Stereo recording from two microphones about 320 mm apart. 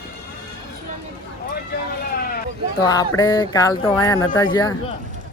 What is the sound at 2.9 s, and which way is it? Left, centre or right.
Speech, centre.